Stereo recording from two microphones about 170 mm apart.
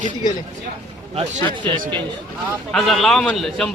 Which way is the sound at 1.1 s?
30° right (ahead or behind).